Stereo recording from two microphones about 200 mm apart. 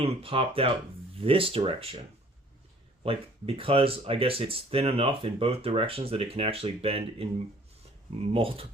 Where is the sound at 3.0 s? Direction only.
30° right (ahead or behind).